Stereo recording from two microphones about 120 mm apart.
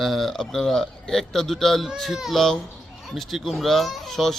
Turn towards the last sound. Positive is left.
turn(degrees=0)  # may be behind; listen again after turning